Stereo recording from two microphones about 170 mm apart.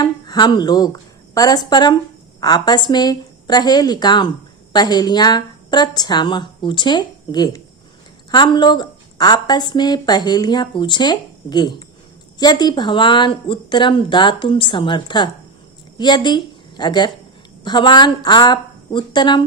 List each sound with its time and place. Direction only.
0.0 s a woman's voice: 25° left (ahead or behind)